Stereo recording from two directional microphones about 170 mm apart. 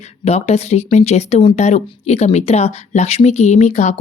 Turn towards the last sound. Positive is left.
turn(degrees=40)  # may be behind; listen again after turning